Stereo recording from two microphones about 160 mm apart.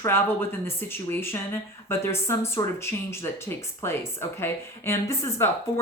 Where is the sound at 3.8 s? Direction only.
15° left (ahead or behind).